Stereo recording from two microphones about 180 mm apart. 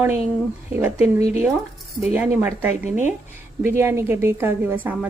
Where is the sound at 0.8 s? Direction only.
10° right (ahead or behind).